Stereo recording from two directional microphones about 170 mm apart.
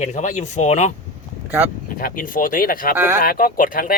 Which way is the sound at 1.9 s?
55° left (ahead or behind).